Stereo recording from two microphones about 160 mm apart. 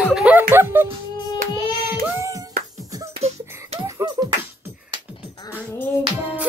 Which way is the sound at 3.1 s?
40° right (ahead or behind).